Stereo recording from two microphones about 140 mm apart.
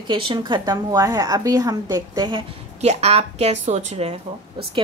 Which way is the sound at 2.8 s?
50° right (ahead or behind).